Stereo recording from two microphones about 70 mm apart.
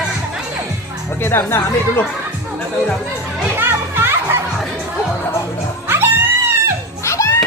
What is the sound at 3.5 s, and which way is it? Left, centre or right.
Music, right.